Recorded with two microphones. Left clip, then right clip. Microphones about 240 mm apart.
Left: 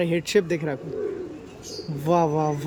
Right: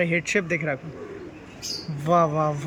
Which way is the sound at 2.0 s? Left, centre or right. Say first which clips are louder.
Right 1 dB; centre.